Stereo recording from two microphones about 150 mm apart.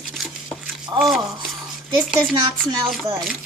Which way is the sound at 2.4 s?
30° right (ahead or behind).